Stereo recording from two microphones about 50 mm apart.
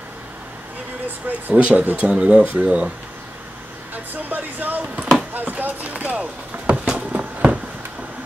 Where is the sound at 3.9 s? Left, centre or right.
Right.